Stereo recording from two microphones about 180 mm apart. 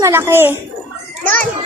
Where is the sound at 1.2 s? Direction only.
10° left (ahead or behind).